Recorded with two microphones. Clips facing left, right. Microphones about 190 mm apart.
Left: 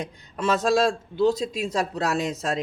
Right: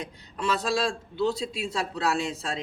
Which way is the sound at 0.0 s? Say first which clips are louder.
Left 4 dB; 45° left (ahead or behind).